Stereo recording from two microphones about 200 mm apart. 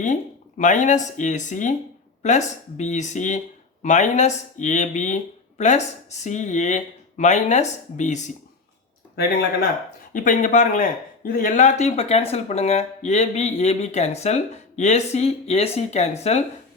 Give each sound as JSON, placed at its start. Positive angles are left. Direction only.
{"t": 0.0, "sound": "speech", "side_deg": 35}
{"t": 10.1, "sound": "speech", "side_deg": 40}